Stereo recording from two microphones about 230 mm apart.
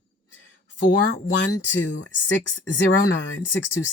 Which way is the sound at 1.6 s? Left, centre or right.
Left.